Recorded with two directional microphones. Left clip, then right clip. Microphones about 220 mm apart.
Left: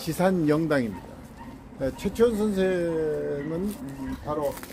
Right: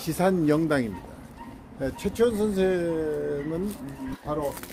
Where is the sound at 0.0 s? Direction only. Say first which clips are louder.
Even; 15° right (ahead or behind).